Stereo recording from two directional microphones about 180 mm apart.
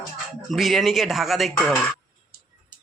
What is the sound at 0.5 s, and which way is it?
Speech, centre (ahead or behind).